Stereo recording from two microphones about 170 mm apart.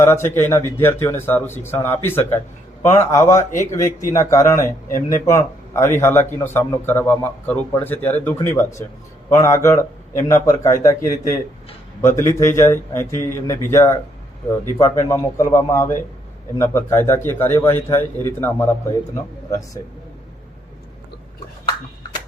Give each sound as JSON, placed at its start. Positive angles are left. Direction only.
{"t": 0.0, "sound": "speech", "side_deg": 15}